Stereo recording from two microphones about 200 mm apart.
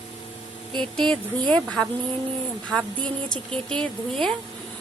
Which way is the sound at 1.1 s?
20° right (ahead or behind).